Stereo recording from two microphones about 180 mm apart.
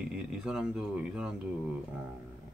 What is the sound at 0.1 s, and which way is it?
Speech, 5° right (ahead or behind).